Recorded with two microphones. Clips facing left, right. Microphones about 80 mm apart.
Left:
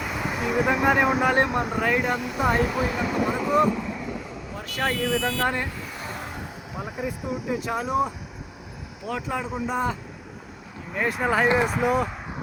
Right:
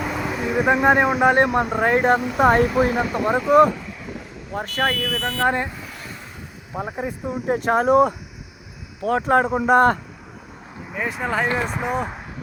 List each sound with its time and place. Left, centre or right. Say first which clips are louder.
0.3 s speech: right 3 dB; right
5.5 s speech: right 6 dB; right
6.7 s speech: right 4 dB; right
7.4 s speech: right 11 dB; right
10.9 s speech: left 1 dB; centre